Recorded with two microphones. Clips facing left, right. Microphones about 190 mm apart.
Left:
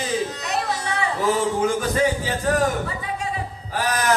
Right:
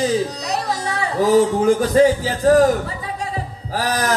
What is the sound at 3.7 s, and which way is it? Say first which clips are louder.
Speech: right 1 dB; 40° right (ahead or behind).